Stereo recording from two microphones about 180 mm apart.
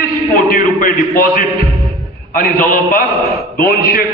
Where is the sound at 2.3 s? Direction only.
50° left (ahead or behind).